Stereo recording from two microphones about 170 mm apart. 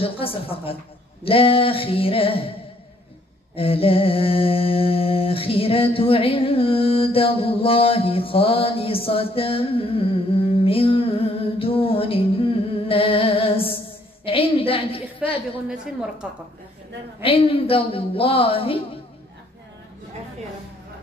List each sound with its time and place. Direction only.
0.0 s a woman's voice: 35° left (ahead or behind)
3.5 s a sound: 35° left (ahead or behind)
14.2 s a woman's voice: 35° left (ahead or behind)
16.2 s a woman's voice: 5° right (ahead or behind)
17.2 s a woman's voice: 35° left (ahead or behind)